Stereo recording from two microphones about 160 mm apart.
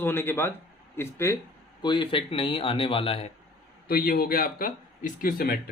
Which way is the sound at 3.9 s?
70° left (ahead or behind).